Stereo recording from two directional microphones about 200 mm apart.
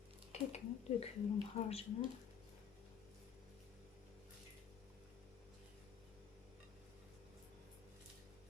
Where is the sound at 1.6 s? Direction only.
30° left (ahead or behind).